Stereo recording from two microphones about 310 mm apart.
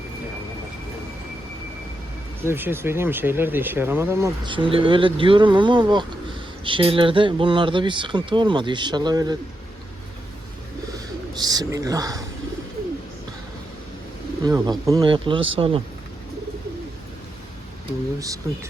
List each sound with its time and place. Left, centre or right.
2.4 s speech: centre
11.3 s speech: centre
14.4 s speech: centre
18.2 s speech: centre